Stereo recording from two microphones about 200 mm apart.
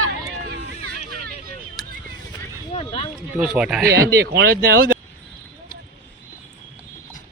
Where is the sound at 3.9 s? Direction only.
15° right (ahead or behind).